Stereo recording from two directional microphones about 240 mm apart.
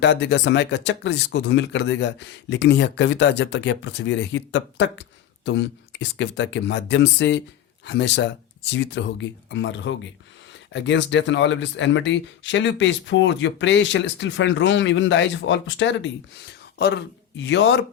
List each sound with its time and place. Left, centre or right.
0.0 s speech: left